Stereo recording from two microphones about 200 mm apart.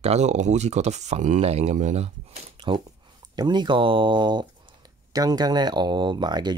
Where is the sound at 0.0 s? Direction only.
35° right (ahead or behind).